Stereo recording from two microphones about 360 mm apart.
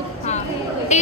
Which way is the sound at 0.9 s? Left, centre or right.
Centre.